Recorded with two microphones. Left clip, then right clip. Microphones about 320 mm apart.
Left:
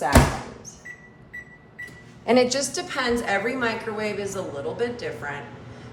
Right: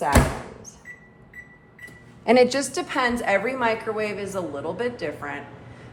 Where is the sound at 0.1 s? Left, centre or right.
Centre.